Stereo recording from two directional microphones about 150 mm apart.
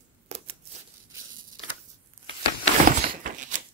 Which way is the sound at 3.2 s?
60° right (ahead or behind).